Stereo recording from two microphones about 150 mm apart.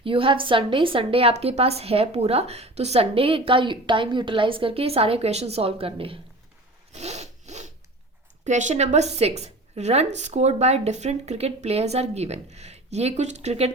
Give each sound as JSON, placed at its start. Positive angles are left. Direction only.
{"t": 0.0, "sound": "a woman's voice", "side_deg": -35}
{"t": 6.9, "sound": "sawing", "side_deg": -45}
{"t": 8.4, "sound": "a woman's voice", "side_deg": -55}